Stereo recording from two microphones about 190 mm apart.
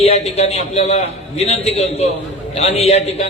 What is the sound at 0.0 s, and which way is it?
Speech, 35° left (ahead or behind).